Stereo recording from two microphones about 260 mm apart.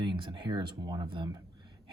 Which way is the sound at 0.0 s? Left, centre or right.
Centre.